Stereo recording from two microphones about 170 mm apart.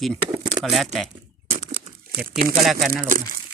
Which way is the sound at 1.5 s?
40° right (ahead or behind).